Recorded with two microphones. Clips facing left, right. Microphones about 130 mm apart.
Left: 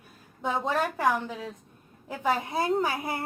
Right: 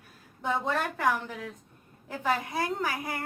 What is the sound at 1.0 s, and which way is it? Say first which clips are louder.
A woman's voice: left 2 dB; 20° left (ahead or behind).